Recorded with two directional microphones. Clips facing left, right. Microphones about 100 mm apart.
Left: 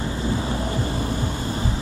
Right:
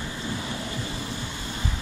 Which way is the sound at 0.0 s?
35° left (ahead or behind).